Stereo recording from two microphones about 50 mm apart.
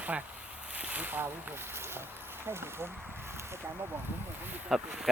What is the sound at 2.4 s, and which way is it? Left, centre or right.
Speech, right.